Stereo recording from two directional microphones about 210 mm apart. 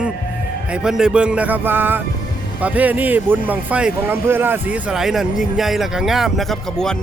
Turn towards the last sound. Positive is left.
turn(degrees=0)  # may be behind; listen again after turning